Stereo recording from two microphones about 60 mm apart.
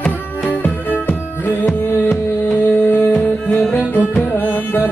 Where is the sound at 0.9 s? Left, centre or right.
Left.